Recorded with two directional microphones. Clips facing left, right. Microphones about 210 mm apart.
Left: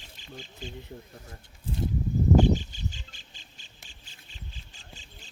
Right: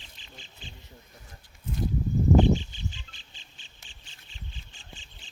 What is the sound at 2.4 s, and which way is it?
Bird, 45° left (ahead or behind).